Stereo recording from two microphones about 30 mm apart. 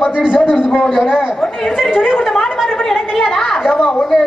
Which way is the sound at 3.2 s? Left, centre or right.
Centre.